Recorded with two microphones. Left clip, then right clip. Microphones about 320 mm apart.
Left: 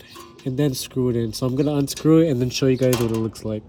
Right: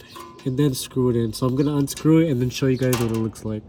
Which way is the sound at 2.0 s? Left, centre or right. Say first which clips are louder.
Left 2 dB; centre.